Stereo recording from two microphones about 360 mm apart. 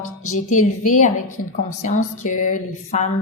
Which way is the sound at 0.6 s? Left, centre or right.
Left.